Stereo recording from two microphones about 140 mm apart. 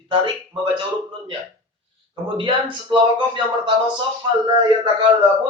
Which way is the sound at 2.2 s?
35° right (ahead or behind).